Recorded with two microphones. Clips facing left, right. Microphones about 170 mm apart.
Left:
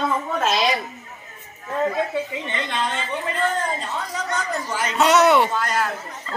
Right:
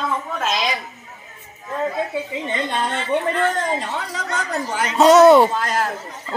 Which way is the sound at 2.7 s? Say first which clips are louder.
Right 5 dB; 60° right (ahead or behind).